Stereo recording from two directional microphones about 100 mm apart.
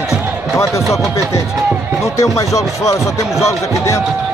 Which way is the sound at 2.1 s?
30° left (ahead or behind).